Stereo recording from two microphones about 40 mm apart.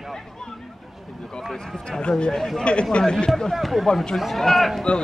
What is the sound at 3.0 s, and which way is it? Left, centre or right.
Speech, centre.